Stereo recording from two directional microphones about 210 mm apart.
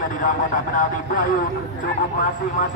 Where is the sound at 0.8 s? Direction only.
40° left (ahead or behind).